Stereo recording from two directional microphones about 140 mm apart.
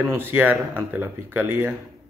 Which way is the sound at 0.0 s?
15° right (ahead or behind).